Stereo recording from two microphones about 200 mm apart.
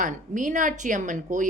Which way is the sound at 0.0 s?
40° right (ahead or behind).